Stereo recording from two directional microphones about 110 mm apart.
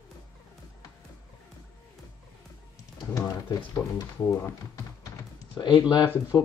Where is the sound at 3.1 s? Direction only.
25° left (ahead or behind).